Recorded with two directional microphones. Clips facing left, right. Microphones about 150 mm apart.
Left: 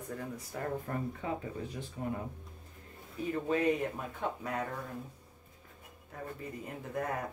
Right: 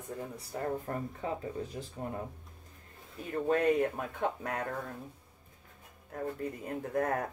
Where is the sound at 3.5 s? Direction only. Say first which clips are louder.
Right 4 dB; 55° right (ahead or behind).